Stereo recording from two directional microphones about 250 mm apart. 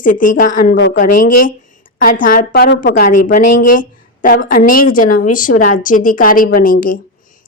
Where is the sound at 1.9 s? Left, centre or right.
Left.